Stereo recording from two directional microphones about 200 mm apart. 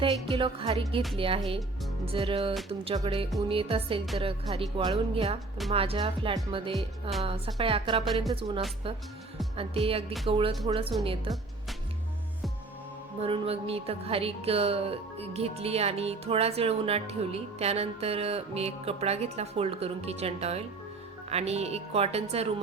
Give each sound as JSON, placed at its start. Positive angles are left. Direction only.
{"t": 0.0, "sound": "speech", "side_deg": -25}
{"t": 8.0, "sound": "speech", "side_deg": 0}
{"t": 8.3, "sound": "speech", "side_deg": -25}
{"t": 13.2, "sound": "a woman's voice", "side_deg": -30}